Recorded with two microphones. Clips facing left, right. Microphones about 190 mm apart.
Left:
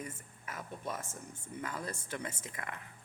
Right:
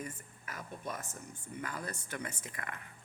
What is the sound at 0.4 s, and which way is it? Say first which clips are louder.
Speech: left 1 dB; 25° left (ahead or behind).